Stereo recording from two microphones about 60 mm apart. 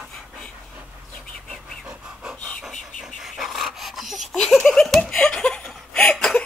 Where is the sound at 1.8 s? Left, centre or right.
Centre.